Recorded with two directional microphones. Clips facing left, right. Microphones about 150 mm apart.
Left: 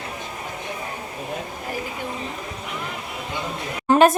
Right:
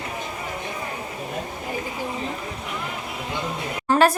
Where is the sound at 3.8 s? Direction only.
20° left (ahead or behind).